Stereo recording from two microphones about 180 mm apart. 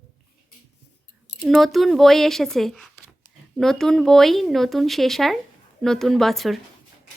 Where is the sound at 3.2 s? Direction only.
20° left (ahead or behind).